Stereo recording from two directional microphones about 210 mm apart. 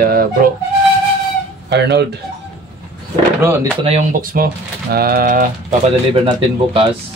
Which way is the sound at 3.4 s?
15° right (ahead or behind).